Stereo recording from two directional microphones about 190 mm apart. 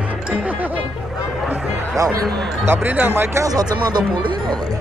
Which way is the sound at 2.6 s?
10° right (ahead or behind).